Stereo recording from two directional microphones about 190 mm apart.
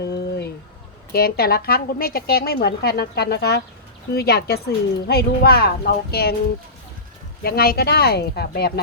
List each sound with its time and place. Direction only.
0.0 s a sound: 60° left (ahead or behind)
1.1 s speech: 55° left (ahead or behind)
7.4 s speech: 55° left (ahead or behind)